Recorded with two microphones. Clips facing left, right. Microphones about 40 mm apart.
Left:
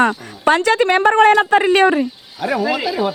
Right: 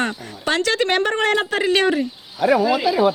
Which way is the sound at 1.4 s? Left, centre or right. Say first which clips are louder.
Left 6 dB; left.